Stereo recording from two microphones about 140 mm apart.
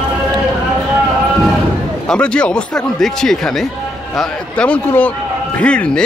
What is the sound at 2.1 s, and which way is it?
A man's voice, 5° left (ahead or behind).